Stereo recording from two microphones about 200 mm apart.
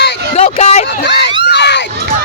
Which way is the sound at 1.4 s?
55° left (ahead or behind).